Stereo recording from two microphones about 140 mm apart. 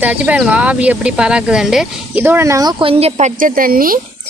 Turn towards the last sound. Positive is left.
turn(degrees=-90)